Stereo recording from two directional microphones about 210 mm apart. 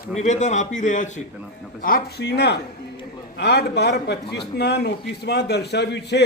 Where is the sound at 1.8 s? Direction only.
45° left (ahead or behind).